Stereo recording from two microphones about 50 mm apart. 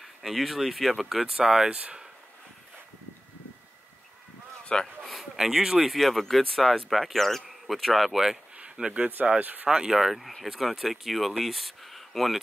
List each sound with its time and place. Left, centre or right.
0.0 s speech: centre
4.7 s speech: centre
5.0 s a sound: centre
5.4 s speech: centre
9.0 s speech: right
9.7 s speech: centre
9.9 s speech: centre